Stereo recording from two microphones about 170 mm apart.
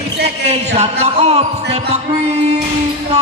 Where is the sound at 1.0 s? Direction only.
40° right (ahead or behind).